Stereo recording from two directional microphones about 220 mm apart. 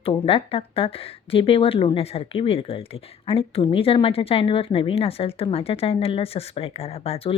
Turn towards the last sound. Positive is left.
turn(degrees=25)  # may be behind; listen again after turning